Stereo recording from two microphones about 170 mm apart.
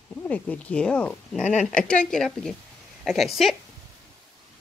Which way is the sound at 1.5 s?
45° left (ahead or behind).